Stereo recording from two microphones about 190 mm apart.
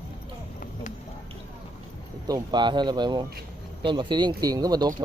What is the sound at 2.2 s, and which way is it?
Speech, 20° right (ahead or behind).